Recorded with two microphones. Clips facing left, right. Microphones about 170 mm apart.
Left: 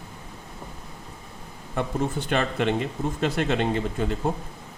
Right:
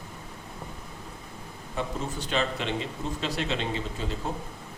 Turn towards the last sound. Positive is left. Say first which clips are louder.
# left 6 dB
turn(degrees=55)  # may be behind; listen again after turning